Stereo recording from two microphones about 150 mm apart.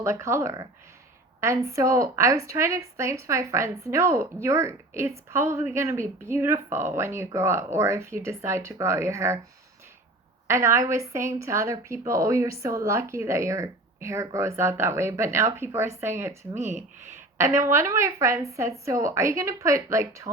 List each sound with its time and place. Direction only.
0.0 s a woman's voice: 20° right (ahead or behind)
10.4 s a woman's voice: 20° right (ahead or behind)